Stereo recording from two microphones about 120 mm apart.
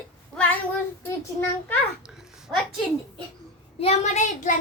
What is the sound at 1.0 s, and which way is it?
Speech, 20° left (ahead or behind).